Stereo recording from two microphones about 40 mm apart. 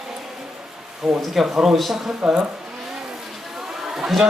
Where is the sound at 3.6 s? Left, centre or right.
Centre.